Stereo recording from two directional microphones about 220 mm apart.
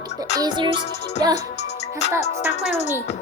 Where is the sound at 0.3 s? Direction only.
20° right (ahead or behind).